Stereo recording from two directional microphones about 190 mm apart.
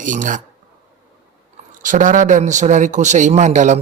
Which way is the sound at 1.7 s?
45° right (ahead or behind).